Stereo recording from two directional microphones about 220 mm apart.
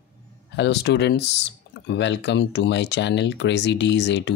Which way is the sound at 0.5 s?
50° left (ahead or behind).